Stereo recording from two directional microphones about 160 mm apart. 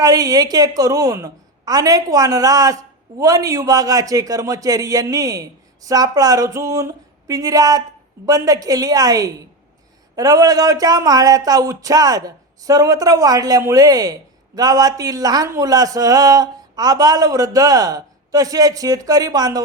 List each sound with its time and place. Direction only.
0.0 s speech: 20° right (ahead or behind)